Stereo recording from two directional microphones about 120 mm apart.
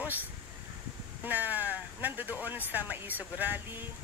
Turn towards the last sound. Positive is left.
turn(degrees=-15)  # may be behind; listen again after turning